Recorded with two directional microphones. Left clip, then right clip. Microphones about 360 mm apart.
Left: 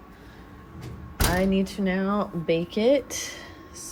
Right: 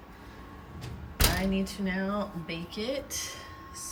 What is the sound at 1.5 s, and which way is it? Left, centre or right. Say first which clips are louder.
Speech: left 6 dB; centre.